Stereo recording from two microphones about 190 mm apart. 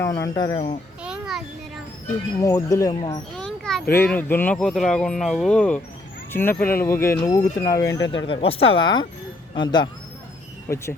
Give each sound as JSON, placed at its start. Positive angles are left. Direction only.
{"t": 0.0, "sound": "speech", "side_deg": 15}
{"t": 1.0, "sound": "a sound", "side_deg": -5}
{"t": 2.4, "sound": "speech", "side_deg": 15}
{"t": 3.3, "sound": "a sound", "side_deg": 5}
{"t": 4.1, "sound": "speech", "side_deg": 10}
{"t": 8.3, "sound": "speech", "side_deg": 30}